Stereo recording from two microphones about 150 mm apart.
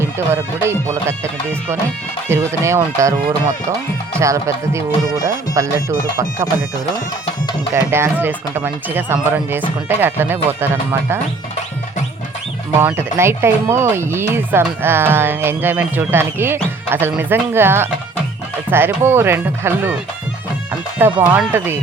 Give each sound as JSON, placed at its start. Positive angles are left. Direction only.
{"t": 0.6, "sound": "speech", "side_deg": -15}
{"t": 2.3, "sound": "speech", "side_deg": -20}
{"t": 7.7, "sound": "speech", "side_deg": -15}
{"t": 12.8, "sound": "speech", "side_deg": -15}
{"t": 21.0, "sound": "speech", "side_deg": -15}